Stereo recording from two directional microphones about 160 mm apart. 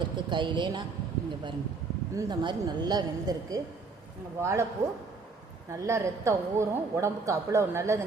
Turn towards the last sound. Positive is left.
turn(degrees=-15)  # may be behind; listen again after turning